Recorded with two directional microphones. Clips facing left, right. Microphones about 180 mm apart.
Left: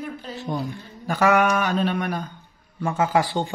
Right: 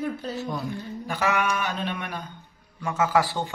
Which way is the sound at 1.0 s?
45° left (ahead or behind).